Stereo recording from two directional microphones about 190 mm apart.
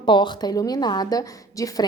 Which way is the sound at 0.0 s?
25° left (ahead or behind).